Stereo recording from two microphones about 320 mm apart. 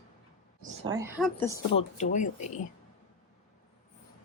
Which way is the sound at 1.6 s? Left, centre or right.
Left.